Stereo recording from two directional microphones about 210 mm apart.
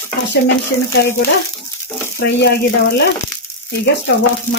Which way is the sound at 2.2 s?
50° left (ahead or behind).